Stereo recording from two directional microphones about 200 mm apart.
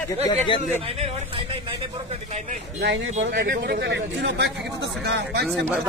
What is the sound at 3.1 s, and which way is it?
A man's voice, 45° right (ahead or behind).